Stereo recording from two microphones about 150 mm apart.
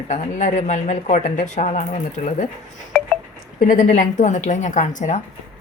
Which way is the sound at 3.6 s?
60° left (ahead or behind).